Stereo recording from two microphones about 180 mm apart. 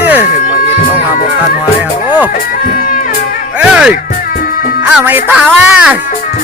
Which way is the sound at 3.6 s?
5° right (ahead or behind).